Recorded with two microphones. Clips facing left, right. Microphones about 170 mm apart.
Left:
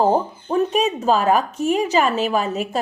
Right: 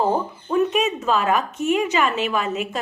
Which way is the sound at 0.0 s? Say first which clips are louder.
Left 3 dB; 30° left (ahead or behind).